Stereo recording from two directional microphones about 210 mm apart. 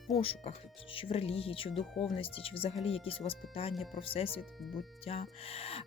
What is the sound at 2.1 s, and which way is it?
Speech, 25° left (ahead or behind).